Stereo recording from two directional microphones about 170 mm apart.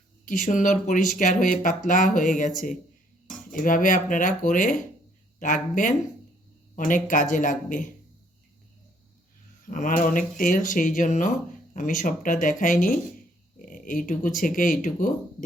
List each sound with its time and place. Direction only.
0.3 s speech: 50° left (ahead or behind)
9.6 s speech: 50° left (ahead or behind)